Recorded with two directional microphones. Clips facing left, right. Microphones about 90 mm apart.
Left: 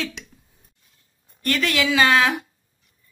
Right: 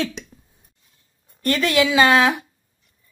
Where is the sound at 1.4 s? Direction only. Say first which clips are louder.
Right 4 dB; 30° right (ahead or behind).